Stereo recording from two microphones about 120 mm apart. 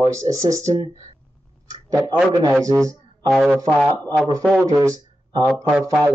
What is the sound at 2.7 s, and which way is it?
Speech, 30° right (ahead or behind).